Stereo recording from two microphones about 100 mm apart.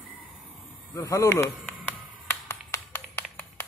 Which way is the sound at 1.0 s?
35° left (ahead or behind).